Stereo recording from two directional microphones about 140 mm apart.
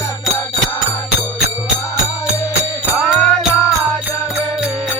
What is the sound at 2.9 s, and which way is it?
Music, 5° left (ahead or behind).